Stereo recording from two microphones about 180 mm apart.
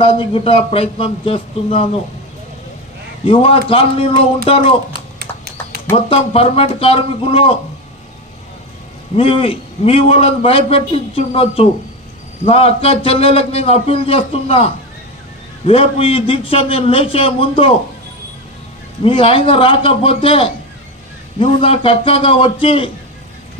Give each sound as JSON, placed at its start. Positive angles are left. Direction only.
{"t": 0.0, "sound": "a man's voice", "side_deg": 30}
{"t": 3.3, "sound": "a man's voice", "side_deg": 30}
{"t": 4.9, "sound": "clip-clop", "side_deg": -60}
{"t": 6.0, "sound": "a man's voice", "side_deg": 30}
{"t": 9.1, "sound": "a man's voice", "side_deg": 30}
{"t": 19.0, "sound": "a man's voice", "side_deg": 30}